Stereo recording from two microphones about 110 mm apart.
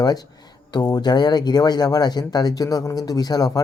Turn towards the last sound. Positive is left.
turn(degrees=35)  # may be behind; listen again after turning